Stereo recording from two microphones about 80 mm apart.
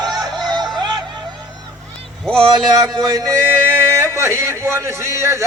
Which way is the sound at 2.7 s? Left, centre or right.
Right.